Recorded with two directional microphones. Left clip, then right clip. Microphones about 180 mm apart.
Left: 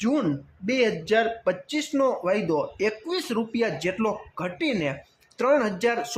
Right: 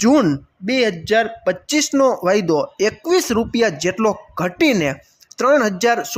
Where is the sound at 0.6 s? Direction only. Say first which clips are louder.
Right 5 dB; 25° right (ahead or behind).